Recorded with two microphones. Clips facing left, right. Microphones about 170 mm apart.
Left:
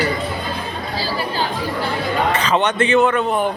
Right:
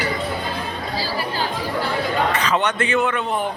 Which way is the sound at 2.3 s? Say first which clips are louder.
Left 3 dB; 25° left (ahead or behind).